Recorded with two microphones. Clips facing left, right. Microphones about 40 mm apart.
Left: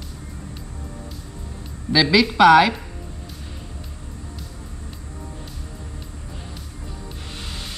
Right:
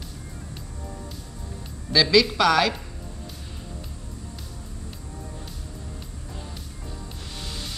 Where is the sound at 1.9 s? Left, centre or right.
Centre.